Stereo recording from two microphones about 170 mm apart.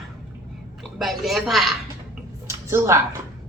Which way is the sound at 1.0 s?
Centre (ahead or behind).